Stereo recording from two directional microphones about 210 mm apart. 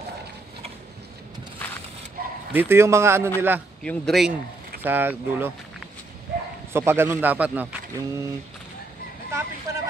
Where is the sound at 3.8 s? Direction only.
Centre (ahead or behind).